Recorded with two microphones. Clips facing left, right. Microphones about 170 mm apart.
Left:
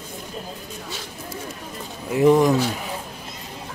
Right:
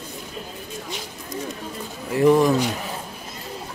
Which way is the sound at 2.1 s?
15° left (ahead or behind).